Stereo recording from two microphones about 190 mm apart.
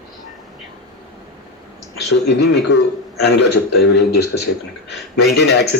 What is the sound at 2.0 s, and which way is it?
A man's voice, 60° left (ahead or behind).